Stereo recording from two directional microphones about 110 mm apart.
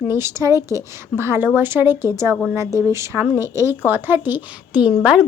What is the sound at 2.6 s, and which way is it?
Speech, 30° right (ahead or behind).